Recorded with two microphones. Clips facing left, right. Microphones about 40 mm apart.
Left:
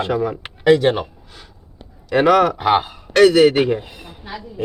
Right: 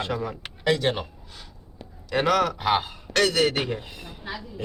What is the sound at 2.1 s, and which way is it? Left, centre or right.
Speech, centre.